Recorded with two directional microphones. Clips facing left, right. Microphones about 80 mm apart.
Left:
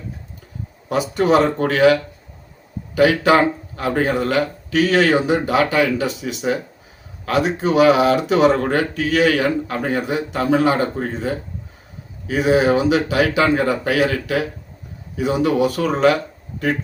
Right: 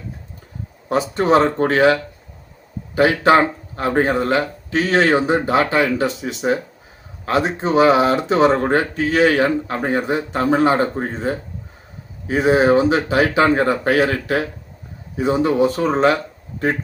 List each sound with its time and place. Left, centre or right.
0.9 s speech: right